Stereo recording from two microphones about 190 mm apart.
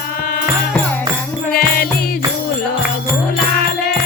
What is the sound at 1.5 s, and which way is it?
Music, 50° left (ahead or behind).